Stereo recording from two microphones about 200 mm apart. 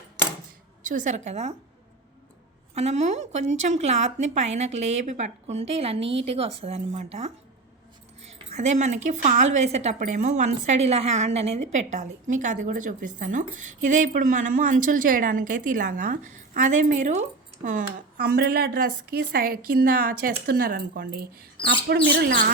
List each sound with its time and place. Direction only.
0.9 s a woman's voice: 40° right (ahead or behind)
2.7 s a woman's voice: 35° right (ahead or behind)
6.0 s a woman's voice: 65° right (ahead or behind)
6.2 s a woman's voice: 30° right (ahead or behind)
8.5 s a woman's voice: 35° right (ahead or behind); by 22.4 s 50° right (ahead or behind)